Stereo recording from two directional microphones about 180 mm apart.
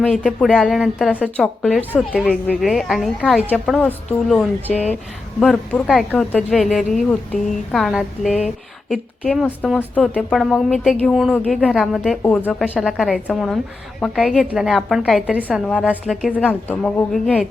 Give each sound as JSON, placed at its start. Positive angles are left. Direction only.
{"t": 0.0, "sound": "speech", "side_deg": 5}